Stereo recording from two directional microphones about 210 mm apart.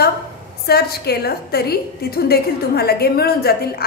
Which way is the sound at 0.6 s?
50° left (ahead or behind).